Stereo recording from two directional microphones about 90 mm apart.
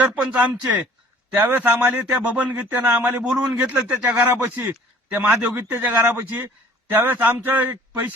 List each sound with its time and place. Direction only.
0.0 s a man's voice: 15° right (ahead or behind)